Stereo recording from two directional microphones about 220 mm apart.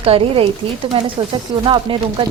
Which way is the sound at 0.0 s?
25° right (ahead or behind).